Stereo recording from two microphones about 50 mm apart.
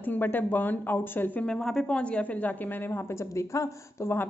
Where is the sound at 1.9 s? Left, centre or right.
Left.